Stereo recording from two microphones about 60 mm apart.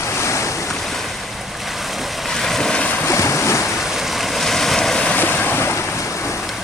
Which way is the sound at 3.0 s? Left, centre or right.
Left.